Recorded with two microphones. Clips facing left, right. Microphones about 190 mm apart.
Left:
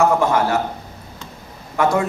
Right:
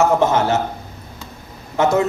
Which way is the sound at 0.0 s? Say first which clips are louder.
Right 1 dB; 20° right (ahead or behind).